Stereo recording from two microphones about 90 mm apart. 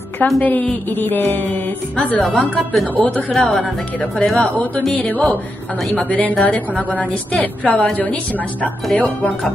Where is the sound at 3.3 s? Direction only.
Centre (ahead or behind).